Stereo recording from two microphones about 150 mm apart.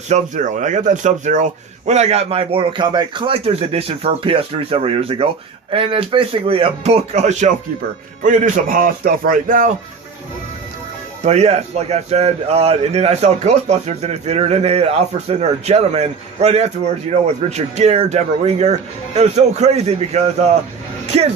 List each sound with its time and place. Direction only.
0.1 s a man's voice: 55° right (ahead or behind)
11.2 s a man's voice: 45° right (ahead or behind)